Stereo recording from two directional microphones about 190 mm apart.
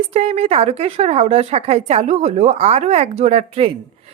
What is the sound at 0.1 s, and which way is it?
A woman's voice, 35° right (ahead or behind).